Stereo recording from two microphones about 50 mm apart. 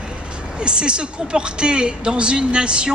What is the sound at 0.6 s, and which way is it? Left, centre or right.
A woman's voice, centre.